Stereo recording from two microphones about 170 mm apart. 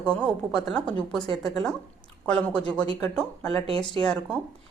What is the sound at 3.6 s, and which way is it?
Speech, 35° right (ahead or behind).